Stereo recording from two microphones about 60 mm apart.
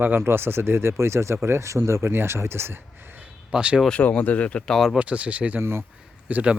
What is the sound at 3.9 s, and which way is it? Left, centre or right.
Speech, left.